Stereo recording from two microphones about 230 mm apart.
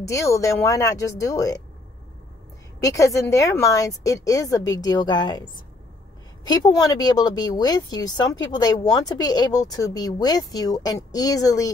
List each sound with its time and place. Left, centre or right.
0.1 s a woman's voice: centre
2.8 s a woman's voice: centre